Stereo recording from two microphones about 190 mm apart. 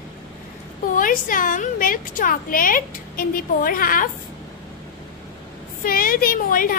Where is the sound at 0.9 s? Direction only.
45° left (ahead or behind).